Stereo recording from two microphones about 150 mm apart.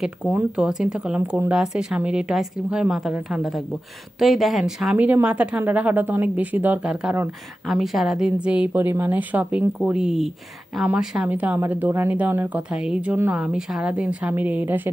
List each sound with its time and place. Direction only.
0.0 s speech: 10° right (ahead or behind)